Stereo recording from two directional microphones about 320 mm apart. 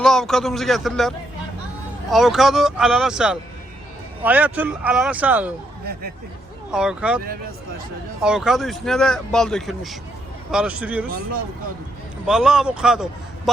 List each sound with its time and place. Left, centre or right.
0.0 s speech: centre
5.8 s speech: right
6.7 s speech: centre
8.2 s speech: centre
12.2 s speech: centre